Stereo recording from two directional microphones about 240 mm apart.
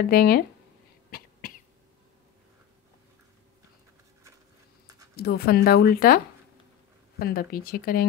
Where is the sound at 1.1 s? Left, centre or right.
Left.